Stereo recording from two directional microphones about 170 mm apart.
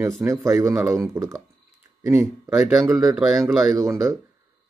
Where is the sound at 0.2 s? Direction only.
15° right (ahead or behind).